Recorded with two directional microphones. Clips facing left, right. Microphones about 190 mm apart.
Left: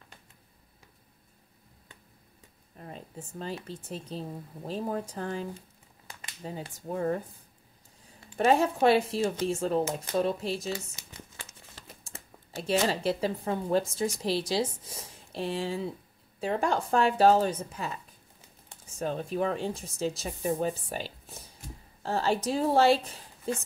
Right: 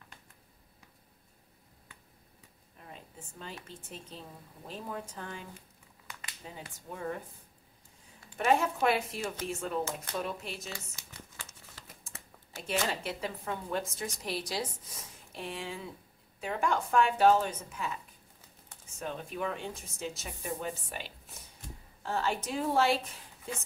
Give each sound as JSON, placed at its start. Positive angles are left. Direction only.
{"t": 2.8, "sound": "speech", "side_deg": 35}
{"t": 8.4, "sound": "speech", "side_deg": 35}
{"t": 10.7, "sound": "speech", "side_deg": 20}
{"t": 12.0, "sound": "speech", "side_deg": 30}